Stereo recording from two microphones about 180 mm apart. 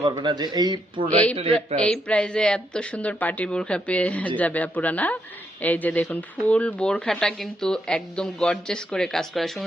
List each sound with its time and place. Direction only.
0.0 s speech: 25° right (ahead or behind)
1.5 s a woman's voice: 5° left (ahead or behind)